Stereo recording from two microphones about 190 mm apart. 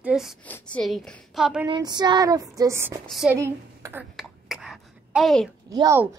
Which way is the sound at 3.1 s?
Centre (ahead or behind).